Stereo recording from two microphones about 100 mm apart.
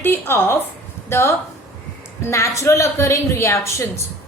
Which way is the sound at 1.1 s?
25° left (ahead or behind).